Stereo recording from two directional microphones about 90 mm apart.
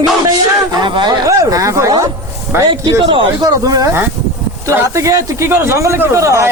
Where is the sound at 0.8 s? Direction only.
60° right (ahead or behind).